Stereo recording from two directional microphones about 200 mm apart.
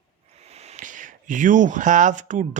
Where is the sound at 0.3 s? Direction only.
30° right (ahead or behind).